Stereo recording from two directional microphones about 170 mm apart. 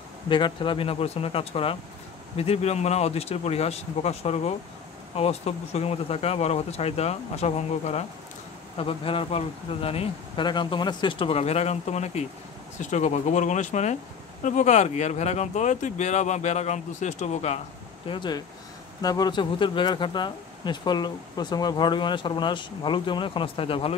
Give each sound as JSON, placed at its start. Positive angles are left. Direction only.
{"t": 0.3, "sound": "speech", "side_deg": 30}
{"t": 18.0, "sound": "speech", "side_deg": 30}